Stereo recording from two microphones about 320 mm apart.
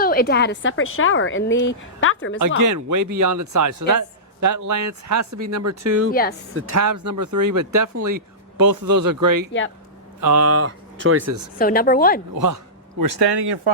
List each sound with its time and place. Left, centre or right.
0.0 s a woman's voice: left
2.6 s speech: right
6.1 s a woman's voice: left
6.5 s a woman's voice: right
6.7 s speech: right
9.5 s a woman's voice: left
10.2 s speech: right
10.4 s speech: right
11.5 s a woman's voice: left
12.3 s speech: right